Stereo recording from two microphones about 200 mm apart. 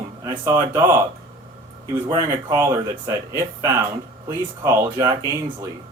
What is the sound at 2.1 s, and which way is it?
Speech, 15° right (ahead or behind).